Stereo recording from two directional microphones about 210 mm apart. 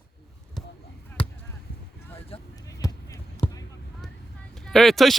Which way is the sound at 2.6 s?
15° left (ahead or behind).